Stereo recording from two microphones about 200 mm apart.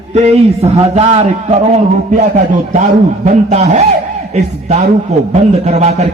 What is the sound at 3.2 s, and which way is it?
Speech, 35° right (ahead or behind).